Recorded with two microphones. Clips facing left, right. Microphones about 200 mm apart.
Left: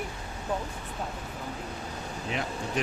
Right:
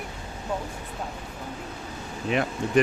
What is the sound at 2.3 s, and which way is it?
Speech, 65° right (ahead or behind).